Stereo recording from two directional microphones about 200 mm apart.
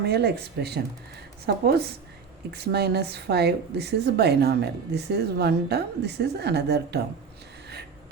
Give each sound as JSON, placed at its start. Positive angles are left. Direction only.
{"t": 0.0, "sound": "a woman's voice", "side_deg": -55}